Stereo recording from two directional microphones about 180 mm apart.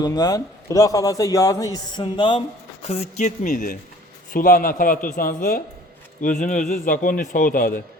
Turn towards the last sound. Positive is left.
turn(degrees=50)  # may be behind; listen again after turning